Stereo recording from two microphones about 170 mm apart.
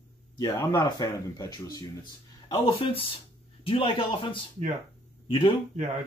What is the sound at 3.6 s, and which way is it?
A man's voice, 35° left (ahead or behind).